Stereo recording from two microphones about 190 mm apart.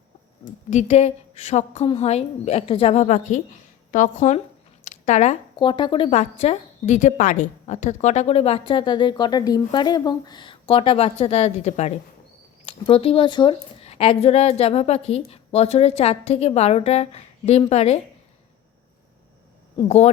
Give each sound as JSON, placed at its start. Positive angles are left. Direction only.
{"t": 0.7, "sound": "a woman's voice", "side_deg": 35}
{"t": 4.9, "sound": "a sound", "side_deg": 40}
{"t": 5.5, "sound": "a woman's voice", "side_deg": 25}